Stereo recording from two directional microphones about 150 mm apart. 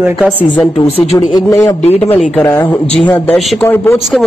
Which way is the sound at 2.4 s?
15° left (ahead or behind).